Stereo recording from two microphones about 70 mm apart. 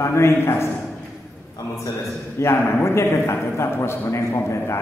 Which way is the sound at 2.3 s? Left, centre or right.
Left.